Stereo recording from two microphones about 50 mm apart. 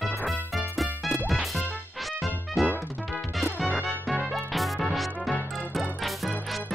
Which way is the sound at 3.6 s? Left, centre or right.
Right.